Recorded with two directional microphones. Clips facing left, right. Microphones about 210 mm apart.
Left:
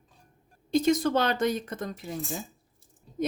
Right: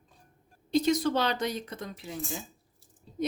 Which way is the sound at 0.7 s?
50° left (ahead or behind).